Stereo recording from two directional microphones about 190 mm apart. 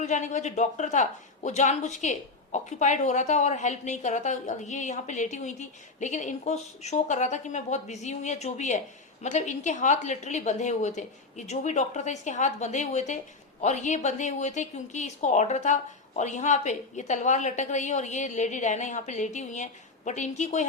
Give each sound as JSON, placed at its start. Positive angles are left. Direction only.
{"t": 0.0, "sound": "a woman's voice", "side_deg": 40}